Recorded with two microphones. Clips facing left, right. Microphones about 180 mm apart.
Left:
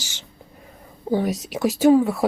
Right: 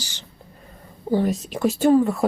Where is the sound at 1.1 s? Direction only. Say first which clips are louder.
Right 1 dB; 10° left (ahead or behind).